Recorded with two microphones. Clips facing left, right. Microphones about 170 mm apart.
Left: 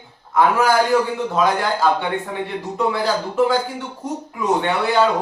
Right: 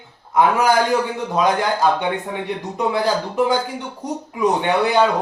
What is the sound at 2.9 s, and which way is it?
Speech, 15° right (ahead or behind).